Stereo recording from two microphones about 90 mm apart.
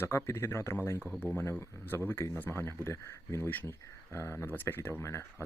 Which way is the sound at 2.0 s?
25° left (ahead or behind).